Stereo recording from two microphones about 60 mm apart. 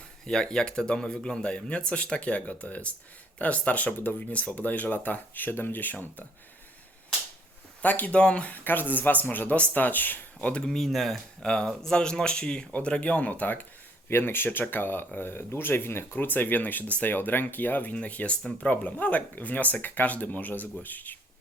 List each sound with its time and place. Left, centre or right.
0.3 s speech: centre; by 6.2 s left
7.8 s speech: left
8.5 s speech: left
10.7 s speech: centre; by 21.2 s left